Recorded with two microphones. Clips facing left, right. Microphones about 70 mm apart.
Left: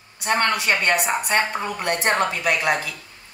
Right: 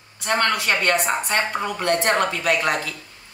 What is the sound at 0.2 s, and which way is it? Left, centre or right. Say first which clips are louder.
Speech: even; left.